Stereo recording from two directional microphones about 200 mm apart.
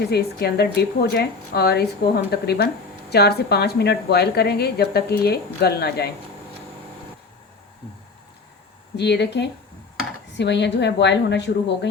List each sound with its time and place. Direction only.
0.1 s a woman's voice: 50° left (ahead or behind)
9.0 s a woman's voice: 60° left (ahead or behind)